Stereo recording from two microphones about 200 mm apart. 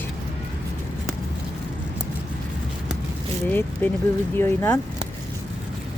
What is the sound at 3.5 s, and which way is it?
Speech, 10° left (ahead or behind).